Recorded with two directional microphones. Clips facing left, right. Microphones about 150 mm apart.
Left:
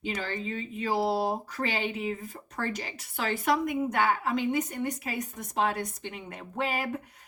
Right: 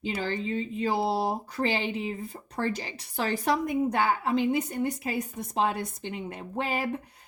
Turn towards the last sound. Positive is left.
turn(degrees=-30)  # may be behind; listen again after turning